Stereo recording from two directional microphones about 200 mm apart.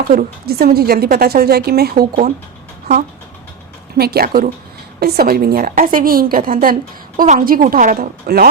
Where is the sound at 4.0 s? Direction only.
50° right (ahead or behind).